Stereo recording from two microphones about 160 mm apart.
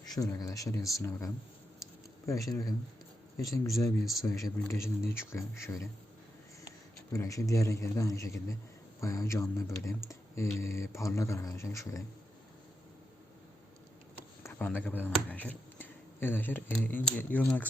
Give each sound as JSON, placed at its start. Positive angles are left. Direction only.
{"t": 0.1, "sound": "speech", "side_deg": 20}
{"t": 1.8, "sound": "a sound", "side_deg": 20}
{"t": 2.5, "sound": "a man's voice", "side_deg": 25}
{"t": 14.4, "sound": "speech", "side_deg": 10}